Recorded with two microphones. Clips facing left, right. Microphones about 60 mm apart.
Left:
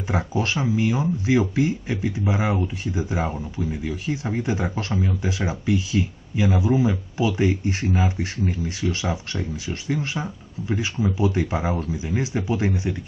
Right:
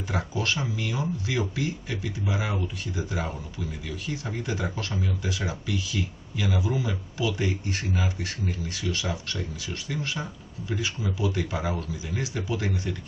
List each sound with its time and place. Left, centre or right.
0.1 s speech: left